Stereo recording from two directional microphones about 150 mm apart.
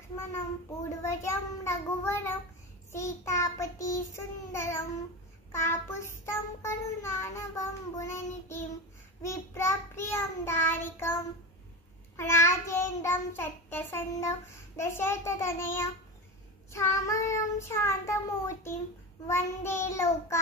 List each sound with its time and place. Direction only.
0.8 s child singing: 20° left (ahead or behind)
12.2 s child singing: 15° left (ahead or behind)